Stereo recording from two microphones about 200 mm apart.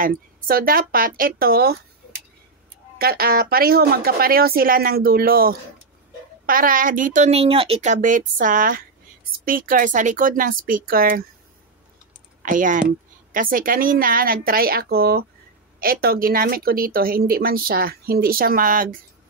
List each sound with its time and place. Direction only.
0.0 s speech: 45° right (ahead or behind)
3.0 s speech: 50° right (ahead or behind)
12.4 s speech: 40° right (ahead or behind)